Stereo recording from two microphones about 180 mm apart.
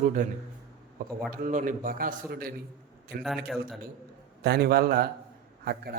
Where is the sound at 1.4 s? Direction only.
45° right (ahead or behind).